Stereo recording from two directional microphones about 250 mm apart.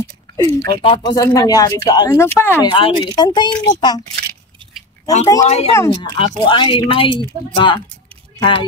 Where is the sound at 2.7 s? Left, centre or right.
Centre.